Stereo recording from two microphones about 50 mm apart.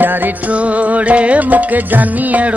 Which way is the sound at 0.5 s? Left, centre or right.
Right.